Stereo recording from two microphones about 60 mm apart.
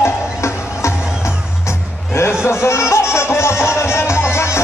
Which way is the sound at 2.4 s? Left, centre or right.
Left.